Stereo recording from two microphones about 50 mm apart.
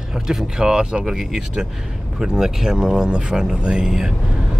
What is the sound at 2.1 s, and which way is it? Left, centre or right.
Speech, centre.